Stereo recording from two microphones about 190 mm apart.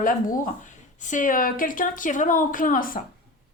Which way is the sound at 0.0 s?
45° left (ahead or behind).